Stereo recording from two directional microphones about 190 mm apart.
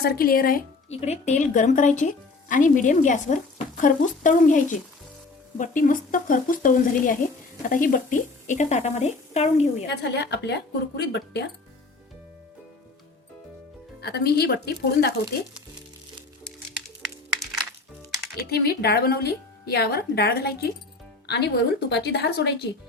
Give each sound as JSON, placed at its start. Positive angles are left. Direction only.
{"t": 0.0, "sound": "speech", "side_deg": 50}
{"t": 0.9, "sound": "speech", "side_deg": 35}
{"t": 9.8, "sound": "a woman's voice", "side_deg": 60}
{"t": 14.0, "sound": "a woman's voice", "side_deg": 55}
{"t": 17.4, "sound": "music", "side_deg": 0}
{"t": 18.3, "sound": "a woman's voice", "side_deg": 55}